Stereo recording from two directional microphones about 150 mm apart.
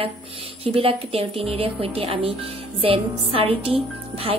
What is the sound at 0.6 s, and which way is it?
A woman's voice, 40° right (ahead or behind).